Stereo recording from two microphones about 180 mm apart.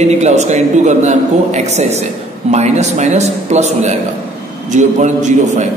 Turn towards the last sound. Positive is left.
turn(degrees=-40)  # may be behind; listen again after turning